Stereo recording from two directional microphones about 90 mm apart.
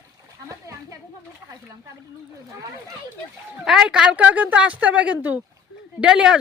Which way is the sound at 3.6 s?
5° right (ahead or behind).